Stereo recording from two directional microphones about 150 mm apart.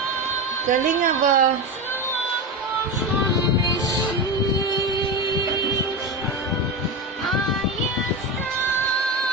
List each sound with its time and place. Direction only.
0.7 s a woman's voice: 65° right (ahead or behind)
3.7 s music: 25° left (ahead or behind)